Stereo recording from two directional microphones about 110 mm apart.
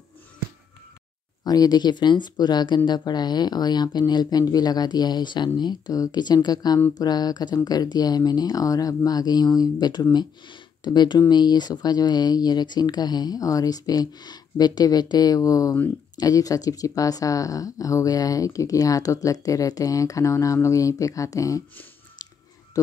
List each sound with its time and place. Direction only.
1.4 s speech: 35° left (ahead or behind)